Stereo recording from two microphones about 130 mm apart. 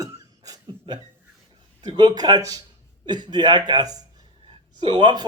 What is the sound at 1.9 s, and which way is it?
Speech, 35° right (ahead or behind).